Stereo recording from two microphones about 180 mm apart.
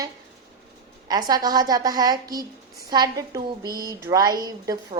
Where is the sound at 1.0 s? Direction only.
20° right (ahead or behind).